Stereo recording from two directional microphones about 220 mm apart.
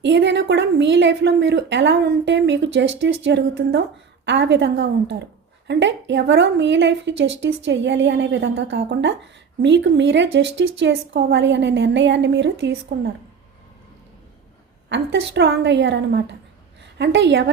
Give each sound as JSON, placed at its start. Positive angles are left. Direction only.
{"t": 0.0, "sound": "a woman's voice", "side_deg": -55}
{"t": 14.8, "sound": "a woman's voice", "side_deg": -55}